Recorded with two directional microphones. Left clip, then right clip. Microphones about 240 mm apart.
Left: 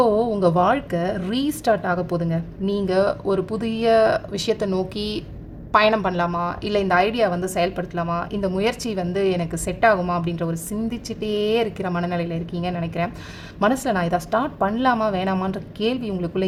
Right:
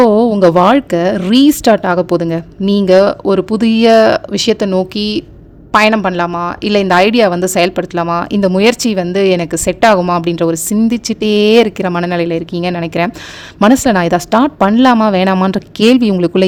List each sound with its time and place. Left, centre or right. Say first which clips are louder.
0.0 s a woman's voice: right 10 dB; right